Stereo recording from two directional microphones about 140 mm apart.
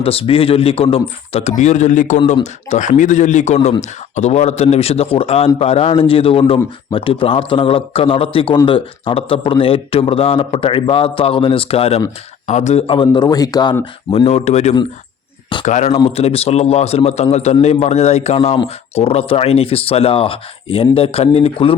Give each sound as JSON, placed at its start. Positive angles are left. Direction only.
{"t": 0.0, "sound": "a man's voice", "side_deg": 40}
{"t": 12.5, "sound": "speech", "side_deg": 55}
{"t": 13.0, "sound": "speech", "side_deg": 30}
{"t": 14.3, "sound": "a man's voice", "side_deg": 50}